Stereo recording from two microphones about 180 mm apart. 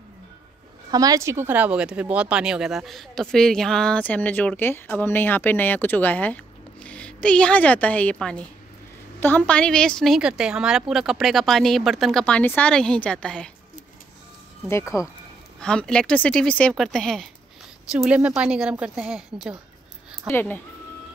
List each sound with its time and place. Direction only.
0.9 s speech: 20° right (ahead or behind); by 13.5 s 5° left (ahead or behind)
14.7 s speech: 15° left (ahead or behind)
15.6 s speech: 5° left (ahead or behind)
20.2 s speech: 10° left (ahead or behind)